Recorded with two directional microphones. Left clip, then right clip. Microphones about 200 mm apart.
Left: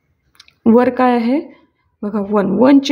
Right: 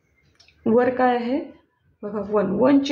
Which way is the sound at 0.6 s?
50° left (ahead or behind).